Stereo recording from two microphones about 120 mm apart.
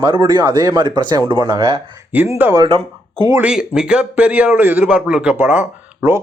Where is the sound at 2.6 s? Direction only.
50° right (ahead or behind).